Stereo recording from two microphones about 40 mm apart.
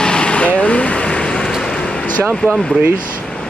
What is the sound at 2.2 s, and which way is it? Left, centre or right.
Speech, right.